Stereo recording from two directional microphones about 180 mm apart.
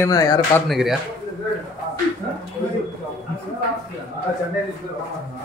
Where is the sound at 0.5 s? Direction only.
Centre (ahead or behind).